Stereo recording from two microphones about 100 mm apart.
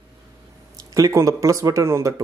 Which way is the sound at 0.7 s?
35° right (ahead or behind).